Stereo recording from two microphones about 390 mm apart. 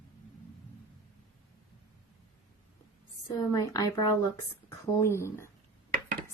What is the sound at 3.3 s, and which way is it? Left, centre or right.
A woman's voice, centre.